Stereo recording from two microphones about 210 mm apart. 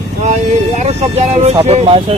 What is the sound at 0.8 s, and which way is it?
Speech, 30° right (ahead or behind).